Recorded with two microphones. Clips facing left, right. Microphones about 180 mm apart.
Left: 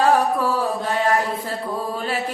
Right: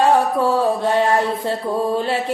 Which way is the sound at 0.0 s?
25° right (ahead or behind).